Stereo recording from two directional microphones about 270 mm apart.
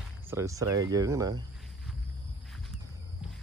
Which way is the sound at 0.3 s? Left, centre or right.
Centre.